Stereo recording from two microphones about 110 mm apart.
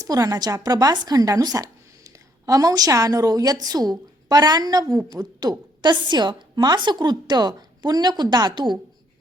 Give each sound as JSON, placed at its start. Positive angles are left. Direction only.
{"t": 0.0, "sound": "a woman's voice", "side_deg": -30}